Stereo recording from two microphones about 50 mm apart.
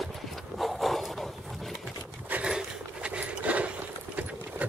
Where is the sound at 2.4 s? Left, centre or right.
Centre.